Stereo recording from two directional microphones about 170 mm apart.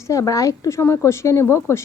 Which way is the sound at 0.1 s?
20° left (ahead or behind).